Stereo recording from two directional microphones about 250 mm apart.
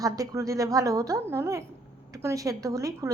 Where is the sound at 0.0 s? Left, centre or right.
Centre.